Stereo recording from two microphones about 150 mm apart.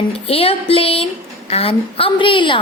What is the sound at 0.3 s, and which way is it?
A woman's voice, 40° left (ahead or behind).